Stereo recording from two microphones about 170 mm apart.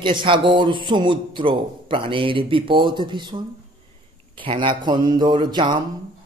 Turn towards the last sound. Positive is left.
turn(degrees=-25)  # may be behind; listen again after turning